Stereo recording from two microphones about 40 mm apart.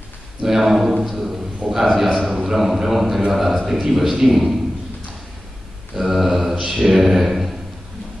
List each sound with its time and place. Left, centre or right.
0.4 s a man's voice: centre
5.9 s a man's voice: centre
6.6 s a man's voice: centre
6.9 s a man's voice: centre